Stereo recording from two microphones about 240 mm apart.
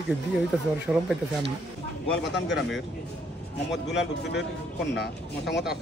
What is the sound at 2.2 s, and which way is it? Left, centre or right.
Speech, left.